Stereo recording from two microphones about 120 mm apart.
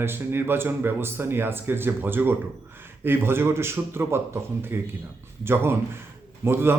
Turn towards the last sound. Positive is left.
turn(degrees=-20)  # may be behind; listen again after turning